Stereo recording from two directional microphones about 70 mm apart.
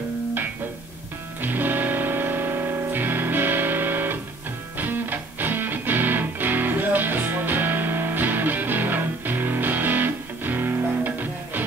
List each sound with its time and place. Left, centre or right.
1.4 s music: right